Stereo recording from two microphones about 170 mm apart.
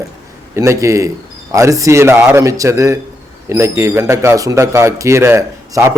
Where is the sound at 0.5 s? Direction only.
15° right (ahead or behind).